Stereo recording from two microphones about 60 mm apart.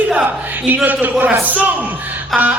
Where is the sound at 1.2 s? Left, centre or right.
Right.